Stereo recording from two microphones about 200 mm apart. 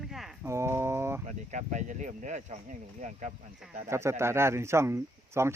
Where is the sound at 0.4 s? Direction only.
15° right (ahead or behind).